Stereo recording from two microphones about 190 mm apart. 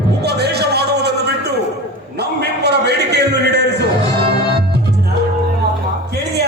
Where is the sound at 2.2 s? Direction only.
60° right (ahead or behind).